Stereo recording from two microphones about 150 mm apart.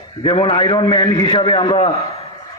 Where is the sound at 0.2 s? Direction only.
35° left (ahead or behind).